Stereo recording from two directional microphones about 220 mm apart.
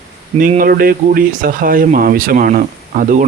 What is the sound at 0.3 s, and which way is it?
Speech, 35° right (ahead or behind).